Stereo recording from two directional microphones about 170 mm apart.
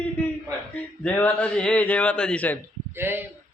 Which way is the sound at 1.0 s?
10° left (ahead or behind).